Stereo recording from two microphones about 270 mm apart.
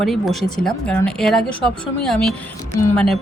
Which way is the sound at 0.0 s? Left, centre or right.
Centre.